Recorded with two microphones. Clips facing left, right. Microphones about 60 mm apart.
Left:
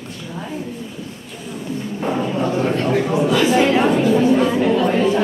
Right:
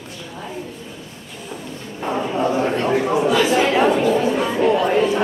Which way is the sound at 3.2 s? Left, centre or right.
Centre.